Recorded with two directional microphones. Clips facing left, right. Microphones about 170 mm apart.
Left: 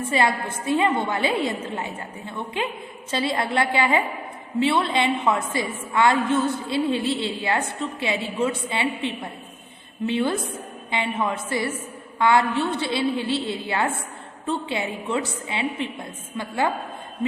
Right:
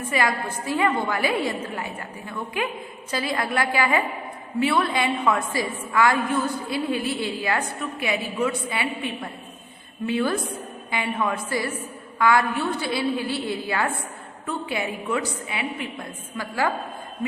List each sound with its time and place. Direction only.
0.1 s a woman's voice: 25° left (ahead or behind)